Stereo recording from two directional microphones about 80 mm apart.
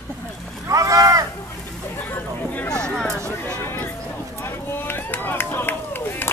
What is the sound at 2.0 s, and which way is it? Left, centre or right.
Hubbub, left.